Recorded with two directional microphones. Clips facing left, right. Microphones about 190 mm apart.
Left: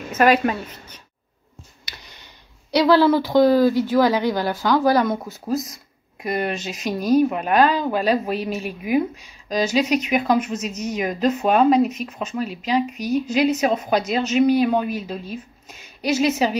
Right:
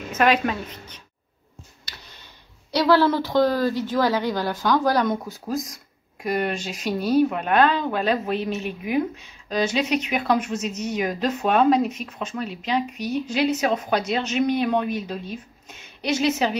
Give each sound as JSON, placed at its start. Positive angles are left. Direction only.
{"t": 0.1, "sound": "speech", "side_deg": 5}
{"t": 2.7, "sound": "speech", "side_deg": 10}
{"t": 5.5, "sound": "speech", "side_deg": -15}
{"t": 6.2, "sound": "speech", "side_deg": 5}